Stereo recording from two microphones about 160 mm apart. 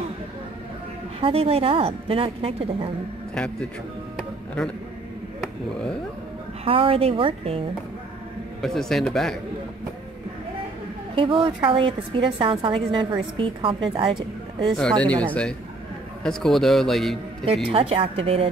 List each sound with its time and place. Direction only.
1.2 s a woman's voice: 40° right (ahead or behind)
6.6 s a woman's voice: 35° right (ahead or behind)
8.5 s a man's voice: centre (ahead or behind)
11.1 s a woman's voice: 30° right (ahead or behind)
14.8 s a man's voice: 5° left (ahead or behind)
17.6 s a woman's voice: 35° right (ahead or behind)